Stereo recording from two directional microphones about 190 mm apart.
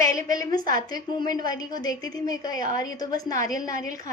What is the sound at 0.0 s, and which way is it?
A woman's voice, 15° left (ahead or behind).